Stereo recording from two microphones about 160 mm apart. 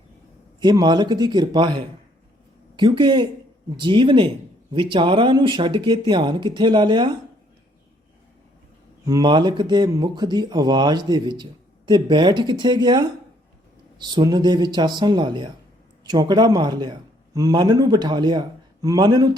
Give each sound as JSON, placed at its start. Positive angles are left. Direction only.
{"t": 0.6, "sound": "speech", "side_deg": -25}
{"t": 9.0, "sound": "a man's voice", "side_deg": -25}